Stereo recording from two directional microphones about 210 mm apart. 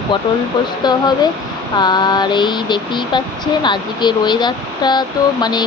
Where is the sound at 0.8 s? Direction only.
20° left (ahead or behind).